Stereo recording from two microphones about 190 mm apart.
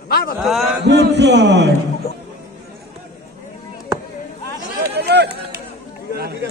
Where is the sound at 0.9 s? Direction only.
60° right (ahead or behind).